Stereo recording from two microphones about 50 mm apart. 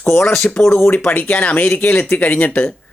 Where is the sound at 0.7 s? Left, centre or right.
Left.